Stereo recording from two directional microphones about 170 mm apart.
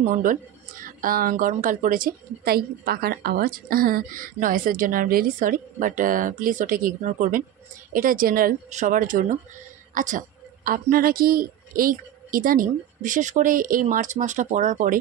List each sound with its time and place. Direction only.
0.0 s a woman's voice: 50° right (ahead or behind)
8.6 s speech: 45° right (ahead or behind)